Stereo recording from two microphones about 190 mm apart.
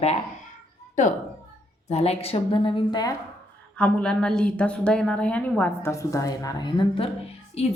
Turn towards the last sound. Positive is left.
turn(degrees=30)  # may be behind; listen again after turning